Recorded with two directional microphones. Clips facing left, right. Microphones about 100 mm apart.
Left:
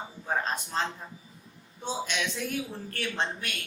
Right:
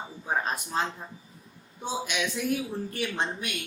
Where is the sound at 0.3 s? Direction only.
15° right (ahead or behind).